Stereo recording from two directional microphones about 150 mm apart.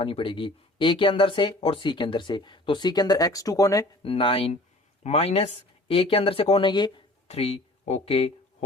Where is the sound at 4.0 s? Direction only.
35° left (ahead or behind).